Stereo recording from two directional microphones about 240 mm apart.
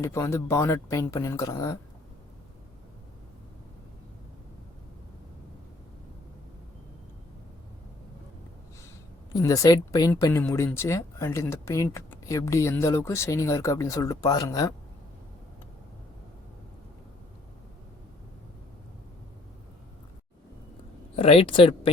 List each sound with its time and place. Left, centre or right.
0.0 s speech: centre
9.3 s speech: centre
21.2 s speech: left